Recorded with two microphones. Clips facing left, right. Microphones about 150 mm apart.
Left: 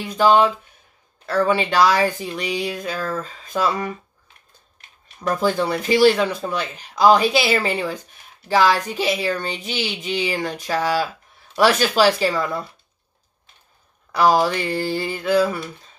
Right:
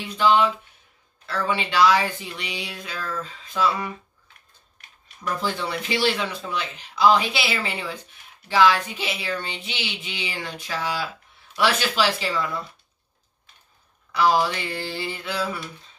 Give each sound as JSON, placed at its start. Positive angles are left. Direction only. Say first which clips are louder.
{"t": 0.1, "sound": "speech", "louder": "left 4 dB", "side_deg": 40}
{"t": 5.2, "sound": "speech", "louder": "left 7 dB", "side_deg": 45}
{"t": 14.1, "sound": "speech", "louder": "left 4 dB", "side_deg": 40}